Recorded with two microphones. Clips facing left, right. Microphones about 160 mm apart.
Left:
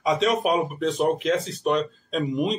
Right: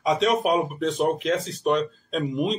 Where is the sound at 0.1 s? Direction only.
30° right (ahead or behind).